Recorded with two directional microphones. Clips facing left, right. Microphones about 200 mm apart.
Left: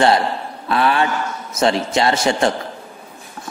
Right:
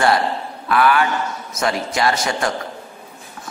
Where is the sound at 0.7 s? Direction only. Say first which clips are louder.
Right 1 dB; 25° left (ahead or behind).